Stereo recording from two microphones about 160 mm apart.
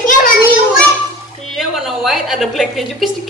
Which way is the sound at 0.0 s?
55° left (ahead or behind).